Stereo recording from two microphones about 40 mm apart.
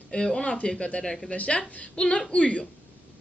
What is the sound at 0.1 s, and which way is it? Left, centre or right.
Speech, centre.